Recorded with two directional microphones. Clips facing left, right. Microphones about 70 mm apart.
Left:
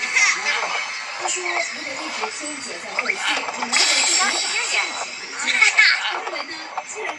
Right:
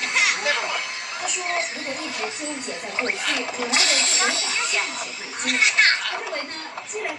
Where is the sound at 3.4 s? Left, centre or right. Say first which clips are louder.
Left 1 dB; centre; by 6.2 s left.